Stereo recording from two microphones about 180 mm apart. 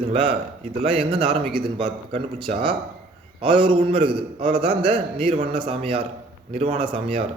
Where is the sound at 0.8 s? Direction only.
30° right (ahead or behind).